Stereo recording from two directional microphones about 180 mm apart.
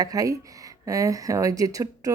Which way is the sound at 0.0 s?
20° right (ahead or behind).